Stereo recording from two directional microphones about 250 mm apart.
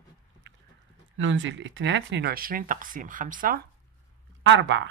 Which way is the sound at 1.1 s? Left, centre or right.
Right.